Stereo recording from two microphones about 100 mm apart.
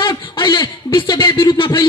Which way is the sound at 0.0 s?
55° left (ahead or behind).